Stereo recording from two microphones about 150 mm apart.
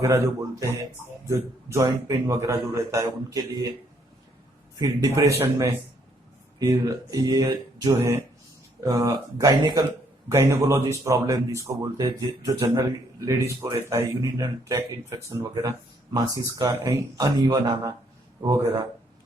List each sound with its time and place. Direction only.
0.0 s speech: 20° right (ahead or behind)
4.8 s speech: 25° right (ahead or behind)